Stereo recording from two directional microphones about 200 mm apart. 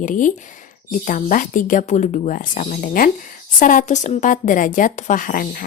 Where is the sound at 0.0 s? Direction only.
40° left (ahead or behind).